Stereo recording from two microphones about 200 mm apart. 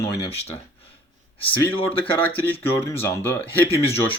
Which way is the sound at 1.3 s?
25° left (ahead or behind).